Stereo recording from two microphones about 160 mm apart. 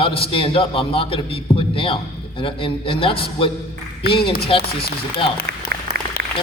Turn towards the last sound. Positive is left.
turn(degrees=-90)